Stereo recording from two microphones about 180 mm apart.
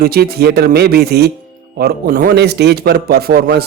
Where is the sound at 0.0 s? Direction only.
60° right (ahead or behind).